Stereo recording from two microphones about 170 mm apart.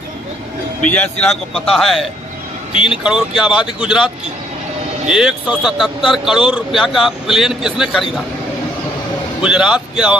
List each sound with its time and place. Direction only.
0.9 s speech: 5° left (ahead or behind)
9.4 s speech: 5° right (ahead or behind)